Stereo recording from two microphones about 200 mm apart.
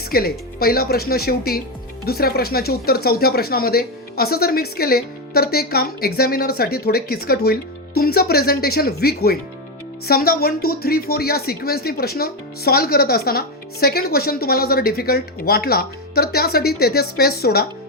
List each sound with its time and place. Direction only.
0.1 s speech: 50° left (ahead or behind)